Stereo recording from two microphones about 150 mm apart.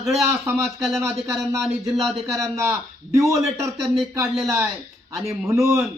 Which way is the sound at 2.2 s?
20° right (ahead or behind).